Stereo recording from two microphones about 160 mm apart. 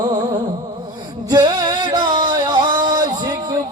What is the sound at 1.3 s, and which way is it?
Music, 25° right (ahead or behind).